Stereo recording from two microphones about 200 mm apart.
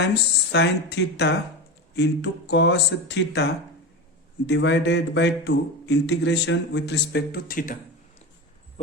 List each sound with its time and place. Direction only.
0.0 s speech: 55° left (ahead or behind)